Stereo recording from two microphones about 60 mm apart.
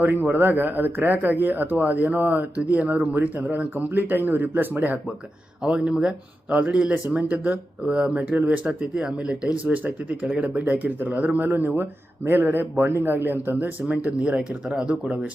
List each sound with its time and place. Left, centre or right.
0.0 s speech: right
5.6 s speech: centre; by 13.7 s right
13.8 s speech: centre